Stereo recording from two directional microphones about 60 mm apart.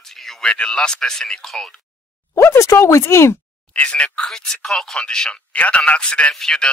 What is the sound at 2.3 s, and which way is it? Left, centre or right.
Speech, left.